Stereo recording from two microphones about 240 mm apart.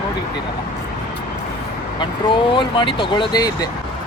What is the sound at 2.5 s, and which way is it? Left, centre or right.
Speech, centre.